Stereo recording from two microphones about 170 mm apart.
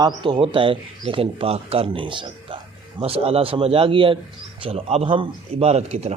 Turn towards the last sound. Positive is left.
turn(degrees=-40)  # may be behind; listen again after turning